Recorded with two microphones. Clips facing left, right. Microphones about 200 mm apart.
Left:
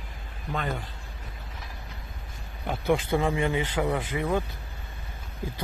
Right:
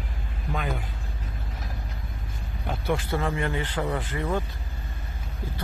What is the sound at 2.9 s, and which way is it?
Speech, 15° left (ahead or behind).